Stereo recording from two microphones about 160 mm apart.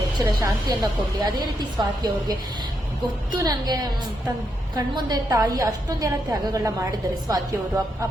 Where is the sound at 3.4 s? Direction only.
25° right (ahead or behind).